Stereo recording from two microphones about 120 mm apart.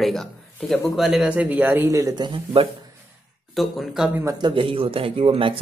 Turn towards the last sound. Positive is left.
turn(degrees=-50)  # may be behind; listen again after turning